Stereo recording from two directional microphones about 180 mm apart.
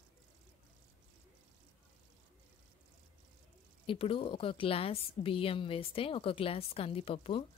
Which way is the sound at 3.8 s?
30° left (ahead or behind).